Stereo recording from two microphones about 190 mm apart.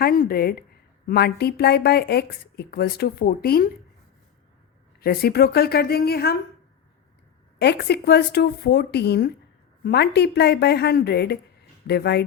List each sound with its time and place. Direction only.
0.0 s a woman's voice: 50° left (ahead or behind)
4.9 s speech: 55° left (ahead or behind)
7.6 s speech: 60° left (ahead or behind)